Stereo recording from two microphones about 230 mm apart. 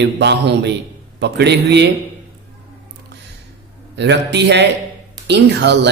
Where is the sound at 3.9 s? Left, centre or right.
Right.